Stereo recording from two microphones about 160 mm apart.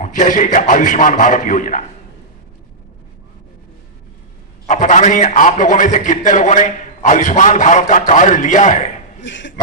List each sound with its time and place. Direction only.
0.0 s a man's voice: 55° left (ahead or behind)
4.7 s a man's voice: 55° left (ahead or behind)